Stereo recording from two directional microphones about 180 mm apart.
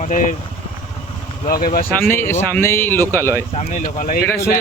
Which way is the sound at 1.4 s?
55° left (ahead or behind).